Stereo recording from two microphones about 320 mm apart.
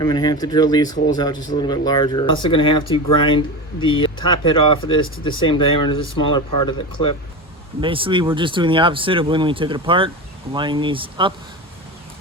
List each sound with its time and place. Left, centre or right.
0.0 s speech: centre
7.8 s speech: centre